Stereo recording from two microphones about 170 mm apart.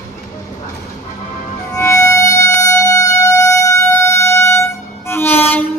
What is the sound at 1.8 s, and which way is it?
Music, 15° left (ahead or behind).